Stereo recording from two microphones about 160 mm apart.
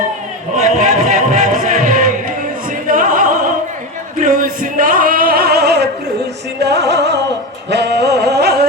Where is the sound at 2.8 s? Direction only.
55° right (ahead or behind); by 8.6 s 90° right.